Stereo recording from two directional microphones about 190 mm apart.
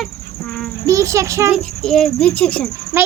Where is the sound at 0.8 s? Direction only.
15° right (ahead or behind).